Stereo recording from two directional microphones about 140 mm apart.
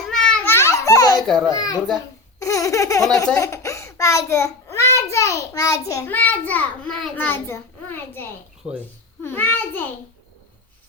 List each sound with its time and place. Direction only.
0.1 s children playing: 5° left (ahead or behind)
0.5 s children playing: 20° left (ahead or behind)
1.5 s a child's voice: 25° left (ahead or behind)
2.4 s baby laughter: 20° left (ahead or behind)
3.3 s a sound: 20° left (ahead or behind)
5.9 s a child's voice: 20° left (ahead or behind)
7.3 s a child's voice: 15° left (ahead or behind)
8.6 s a child's voice: 5° right (ahead or behind)
9.2 s a child's voice: 15° left (ahead or behind)